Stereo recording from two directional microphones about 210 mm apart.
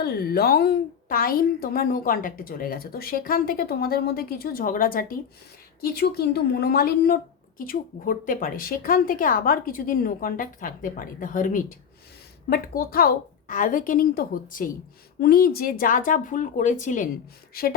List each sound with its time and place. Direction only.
0.0 s a woman's voice: 45° left (ahead or behind)